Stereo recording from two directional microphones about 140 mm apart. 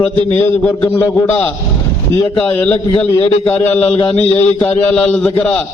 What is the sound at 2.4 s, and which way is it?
Speech, 10° left (ahead or behind).